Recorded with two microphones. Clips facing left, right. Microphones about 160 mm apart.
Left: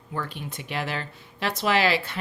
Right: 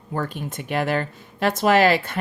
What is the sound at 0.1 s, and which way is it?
Speech, 45° right (ahead or behind).